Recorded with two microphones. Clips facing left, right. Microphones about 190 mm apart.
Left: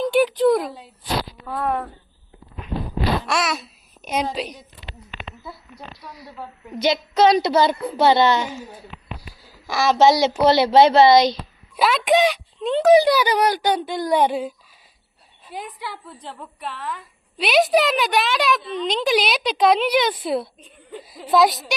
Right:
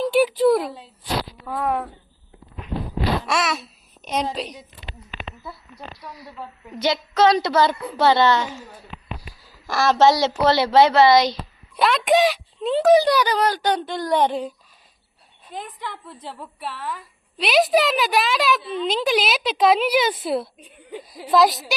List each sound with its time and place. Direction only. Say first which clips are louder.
0.0 s speech: even; 5° right (ahead or behind)
3.2 s a child's voice: even; centre (ahead or behind)
6.8 s a woman's voice: left 1 dB; 15° left (ahead or behind)
11.8 s a child's voice: even; centre (ahead or behind)
12.9 s a woman's voice: left 2 dB; 10° left (ahead or behind)
16.0 s a woman's voice: right 1 dB; 5° right (ahead or behind)